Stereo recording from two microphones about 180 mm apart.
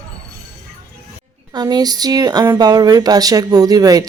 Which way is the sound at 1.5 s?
20° right (ahead or behind).